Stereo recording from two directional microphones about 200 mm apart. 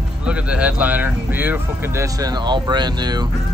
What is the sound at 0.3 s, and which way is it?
Speech, 5° right (ahead or behind).